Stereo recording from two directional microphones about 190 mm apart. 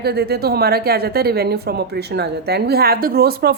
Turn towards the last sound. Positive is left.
turn(degrees=-55)  # may be behind; listen again after turning